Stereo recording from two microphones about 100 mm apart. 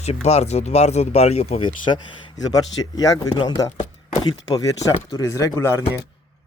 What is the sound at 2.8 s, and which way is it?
Speech, 35° left (ahead or behind).